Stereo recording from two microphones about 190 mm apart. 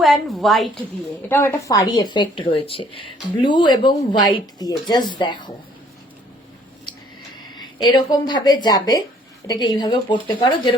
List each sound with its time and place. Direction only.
0.0 s a woman's voice: centre (ahead or behind)
1.3 s a woman's voice: 15° left (ahead or behind)
7.9 s a woman's voice: 20° left (ahead or behind)